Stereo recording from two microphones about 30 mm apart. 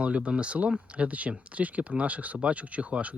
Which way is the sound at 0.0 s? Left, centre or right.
Right.